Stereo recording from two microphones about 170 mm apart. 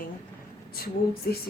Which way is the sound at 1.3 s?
65° left (ahead or behind).